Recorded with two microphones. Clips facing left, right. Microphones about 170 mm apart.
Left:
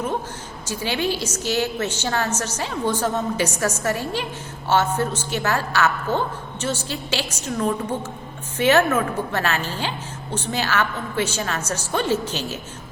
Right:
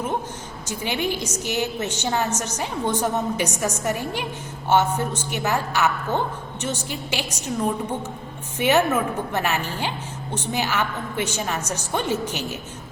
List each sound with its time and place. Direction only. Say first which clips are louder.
0.7 s a woman's voice: left 2 dB; 20° right (ahead or behind)
8.5 s a woman's voice: left 2 dB; 15° right (ahead or behind)